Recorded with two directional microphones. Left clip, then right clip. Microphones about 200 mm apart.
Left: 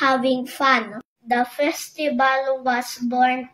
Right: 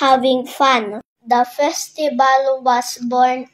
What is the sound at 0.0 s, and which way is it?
A child's voice, 35° right (ahead or behind).